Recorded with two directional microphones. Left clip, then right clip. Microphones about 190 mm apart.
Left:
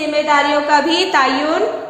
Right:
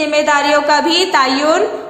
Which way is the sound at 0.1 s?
30° right (ahead or behind).